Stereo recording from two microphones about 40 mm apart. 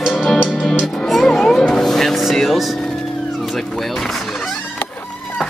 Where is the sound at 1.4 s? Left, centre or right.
Centre.